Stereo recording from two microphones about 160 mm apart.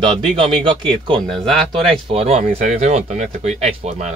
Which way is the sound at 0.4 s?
30° right (ahead or behind).